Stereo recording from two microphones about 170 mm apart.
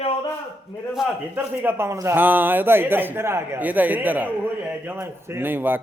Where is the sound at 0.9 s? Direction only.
5° right (ahead or behind).